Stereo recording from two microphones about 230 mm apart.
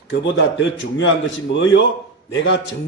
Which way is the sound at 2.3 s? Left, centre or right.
Left.